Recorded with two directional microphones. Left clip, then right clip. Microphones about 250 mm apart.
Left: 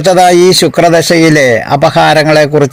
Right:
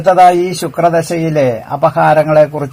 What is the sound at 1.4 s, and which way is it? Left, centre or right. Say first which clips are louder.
Speech: left 5 dB; left.